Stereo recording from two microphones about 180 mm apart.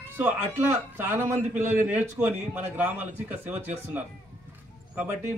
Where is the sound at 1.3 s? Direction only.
40° right (ahead or behind).